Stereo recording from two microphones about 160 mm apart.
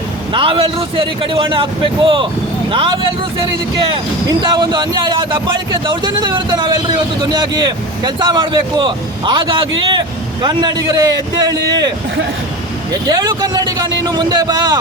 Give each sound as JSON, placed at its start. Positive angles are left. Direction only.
{"t": 0.3, "sound": "a man's voice", "side_deg": -35}
{"t": 12.9, "sound": "a man's voice", "side_deg": -25}